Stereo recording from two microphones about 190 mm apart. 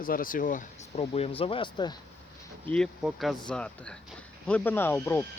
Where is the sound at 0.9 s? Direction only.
30° left (ahead or behind).